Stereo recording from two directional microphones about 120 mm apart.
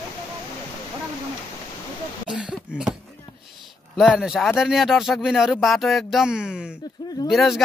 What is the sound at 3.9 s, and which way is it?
Speech, 5° right (ahead or behind).